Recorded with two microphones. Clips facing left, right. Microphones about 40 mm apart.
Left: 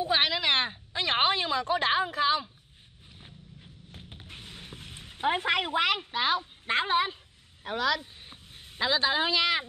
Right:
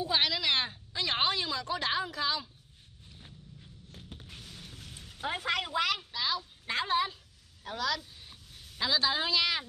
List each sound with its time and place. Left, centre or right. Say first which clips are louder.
0.0 s speech: left 3 dB; left
3.9 s a sound: left 2 dB; left
7.6 s a woman's voice: left 5 dB; left